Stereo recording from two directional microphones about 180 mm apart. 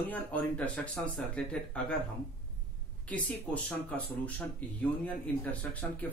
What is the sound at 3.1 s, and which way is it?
Speech, 5° left (ahead or behind).